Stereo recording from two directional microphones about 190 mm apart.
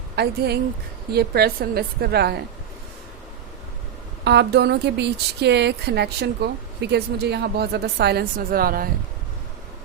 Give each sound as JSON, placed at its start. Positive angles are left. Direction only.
{"t": 0.2, "sound": "speech", "side_deg": -60}
{"t": 4.2, "sound": "speech", "side_deg": -60}